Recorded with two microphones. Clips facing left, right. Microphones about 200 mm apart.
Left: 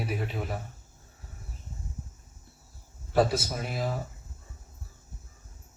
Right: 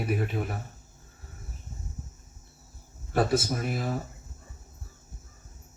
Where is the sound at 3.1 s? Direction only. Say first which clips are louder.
Even; 55° right (ahead or behind).